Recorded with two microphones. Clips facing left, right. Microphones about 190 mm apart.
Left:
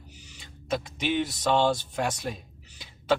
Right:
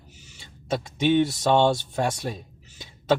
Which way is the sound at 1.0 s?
25° right (ahead or behind).